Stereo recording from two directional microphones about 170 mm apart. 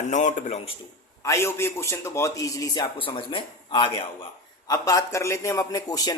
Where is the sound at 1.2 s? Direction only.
15° left (ahead or behind).